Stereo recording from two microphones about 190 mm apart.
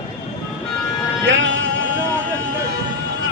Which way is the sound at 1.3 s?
80° right.